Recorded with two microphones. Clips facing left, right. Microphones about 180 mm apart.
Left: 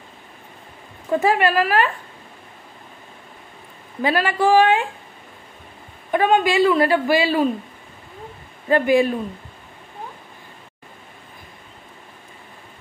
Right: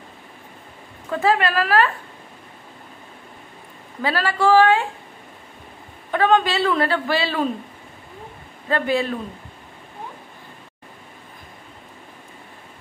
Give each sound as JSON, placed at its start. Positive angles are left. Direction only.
{"t": 1.2, "sound": "speech", "side_deg": 15}
{"t": 4.0, "sound": "speech", "side_deg": 15}
{"t": 6.1, "sound": "speech", "side_deg": 10}
{"t": 8.6, "sound": "speech", "side_deg": 15}